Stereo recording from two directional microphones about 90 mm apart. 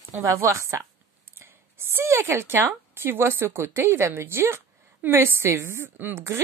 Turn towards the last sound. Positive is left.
turn(degrees=-30)  # may be behind; listen again after turning